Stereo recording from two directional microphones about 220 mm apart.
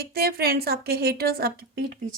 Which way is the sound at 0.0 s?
45° right (ahead or behind).